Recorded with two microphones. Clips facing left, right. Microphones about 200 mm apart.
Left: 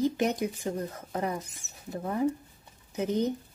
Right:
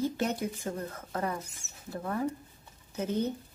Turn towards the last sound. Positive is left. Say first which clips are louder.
# left 3 dB
turn(degrees=15)  # may be behind; listen again after turning